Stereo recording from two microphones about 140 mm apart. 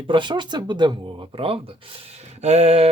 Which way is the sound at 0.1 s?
35° right (ahead or behind).